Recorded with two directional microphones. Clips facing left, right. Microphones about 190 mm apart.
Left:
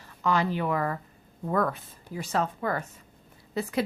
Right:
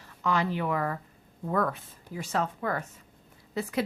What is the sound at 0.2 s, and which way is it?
A woman's voice, 35° left (ahead or behind).